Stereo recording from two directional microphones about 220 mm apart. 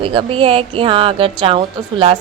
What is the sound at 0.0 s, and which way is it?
Speech, 25° right (ahead or behind).